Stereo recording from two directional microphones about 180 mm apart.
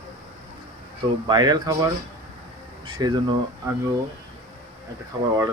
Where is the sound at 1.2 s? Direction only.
25° right (ahead or behind).